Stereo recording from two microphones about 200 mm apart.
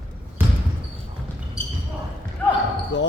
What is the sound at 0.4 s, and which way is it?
Basketball bounce, 10° right (ahead or behind).